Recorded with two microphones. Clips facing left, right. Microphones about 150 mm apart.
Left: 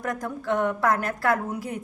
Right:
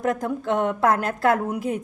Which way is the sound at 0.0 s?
25° right (ahead or behind).